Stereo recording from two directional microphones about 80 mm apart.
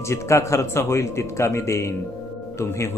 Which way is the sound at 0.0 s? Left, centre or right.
Left.